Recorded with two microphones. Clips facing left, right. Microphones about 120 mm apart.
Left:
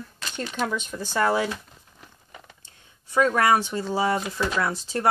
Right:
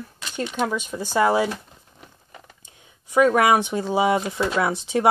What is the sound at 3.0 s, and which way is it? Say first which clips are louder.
Speech: right 3 dB; 15° right (ahead or behind).